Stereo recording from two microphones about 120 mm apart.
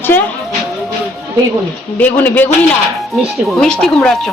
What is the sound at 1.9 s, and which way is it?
Speech, 15° left (ahead or behind).